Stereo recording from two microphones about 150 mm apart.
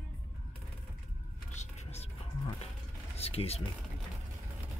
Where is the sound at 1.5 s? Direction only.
45° left (ahead or behind).